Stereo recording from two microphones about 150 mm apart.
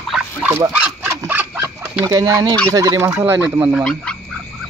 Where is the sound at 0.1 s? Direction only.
10° right (ahead or behind).